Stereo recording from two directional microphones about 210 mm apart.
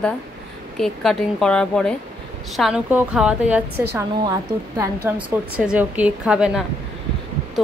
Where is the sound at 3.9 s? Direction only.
15° right (ahead or behind).